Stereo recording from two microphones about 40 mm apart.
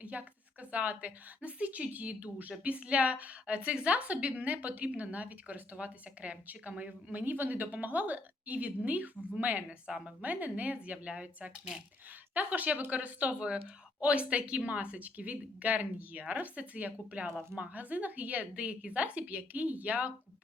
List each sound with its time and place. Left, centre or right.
0.0 s a woman's voice: right
7.1 s a woman's voice: right
9.6 s a woman's voice: right
10.2 s a woman's voice: right
12.3 s a woman's voice: right